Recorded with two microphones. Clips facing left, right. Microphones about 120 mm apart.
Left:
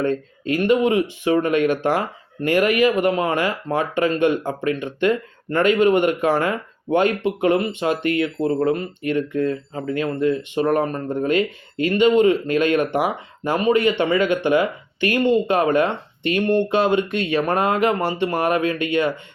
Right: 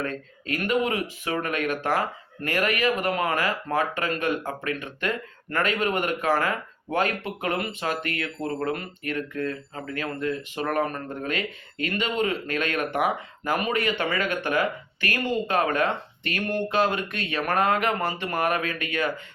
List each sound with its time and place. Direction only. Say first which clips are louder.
0.0 s speech: left 9 dB; 30° left (ahead or behind)